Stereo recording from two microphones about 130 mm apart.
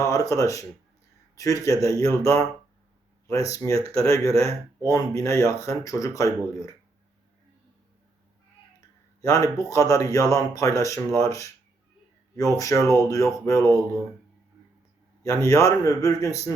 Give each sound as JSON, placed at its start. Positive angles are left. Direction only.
{"t": 0.0, "sound": "speech", "side_deg": 25}
{"t": 3.8, "sound": "speech", "side_deg": -45}
{"t": 4.0, "sound": "speech", "side_deg": 25}
{"t": 9.2, "sound": "speech", "side_deg": 25}
{"t": 15.2, "sound": "speech", "side_deg": 25}